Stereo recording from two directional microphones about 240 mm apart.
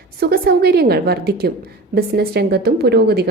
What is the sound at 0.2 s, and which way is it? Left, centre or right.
A woman's voice, right.